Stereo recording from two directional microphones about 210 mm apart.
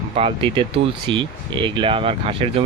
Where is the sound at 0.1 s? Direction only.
25° right (ahead or behind).